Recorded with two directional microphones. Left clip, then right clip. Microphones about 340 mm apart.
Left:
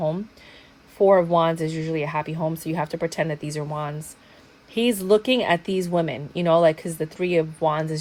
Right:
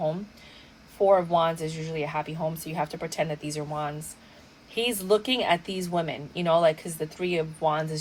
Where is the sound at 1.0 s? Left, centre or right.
Left.